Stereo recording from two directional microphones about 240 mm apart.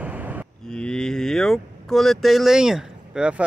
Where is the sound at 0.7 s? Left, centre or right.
Centre.